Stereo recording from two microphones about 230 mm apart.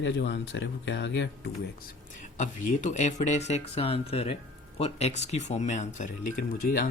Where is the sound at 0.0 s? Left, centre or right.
Left.